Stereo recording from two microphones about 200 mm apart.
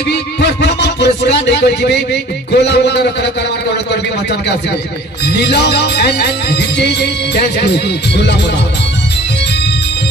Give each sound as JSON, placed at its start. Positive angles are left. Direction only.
{"t": 0.1, "sound": "music", "side_deg": 60}
{"t": 5.2, "sound": "music", "side_deg": 55}